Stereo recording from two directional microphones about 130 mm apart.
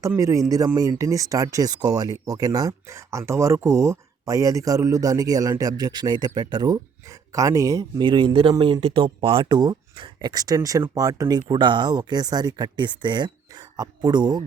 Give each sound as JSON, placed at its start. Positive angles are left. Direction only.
{"t": 0.2, "sound": "speech", "side_deg": -25}